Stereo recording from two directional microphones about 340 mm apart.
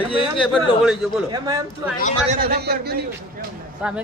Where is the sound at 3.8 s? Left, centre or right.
Centre.